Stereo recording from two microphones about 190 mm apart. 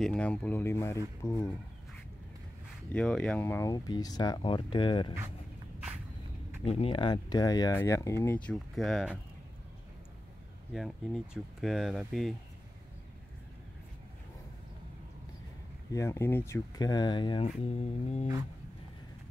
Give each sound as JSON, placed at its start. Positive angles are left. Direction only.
{"t": 0.0, "sound": "speech", "side_deg": 5}
{"t": 2.9, "sound": "speech", "side_deg": 5}
{"t": 6.6, "sound": "speech", "side_deg": 30}
{"t": 10.7, "sound": "speech", "side_deg": 0}
{"t": 15.9, "sound": "speech", "side_deg": 15}
{"t": 17.5, "sound": "a sound", "side_deg": 35}